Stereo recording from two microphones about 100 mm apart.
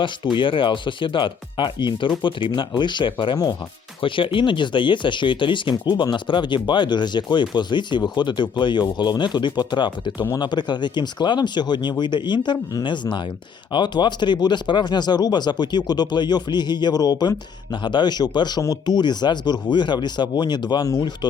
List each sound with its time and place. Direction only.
0.0 s speech: 55° left (ahead or behind)